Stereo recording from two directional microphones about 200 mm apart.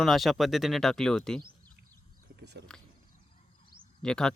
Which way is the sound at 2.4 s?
55° right (ahead or behind).